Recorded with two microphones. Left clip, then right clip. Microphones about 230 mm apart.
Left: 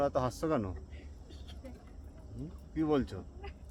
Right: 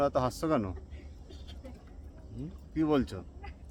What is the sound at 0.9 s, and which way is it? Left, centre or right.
Vehicle, centre.